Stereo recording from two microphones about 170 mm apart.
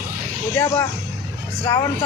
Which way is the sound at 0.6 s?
20° left (ahead or behind).